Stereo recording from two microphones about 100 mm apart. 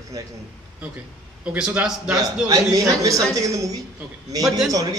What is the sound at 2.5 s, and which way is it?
A man's voice, 35° right (ahead or behind).